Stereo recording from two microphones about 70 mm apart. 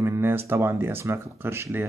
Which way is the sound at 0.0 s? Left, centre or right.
Right.